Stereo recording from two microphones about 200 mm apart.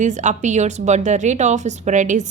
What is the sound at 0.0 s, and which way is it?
A woman's voice, 35° right (ahead or behind).